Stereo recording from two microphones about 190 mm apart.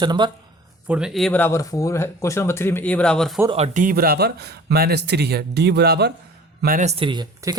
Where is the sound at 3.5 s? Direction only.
35° right (ahead or behind); by 6.1 s 60° right (ahead or behind).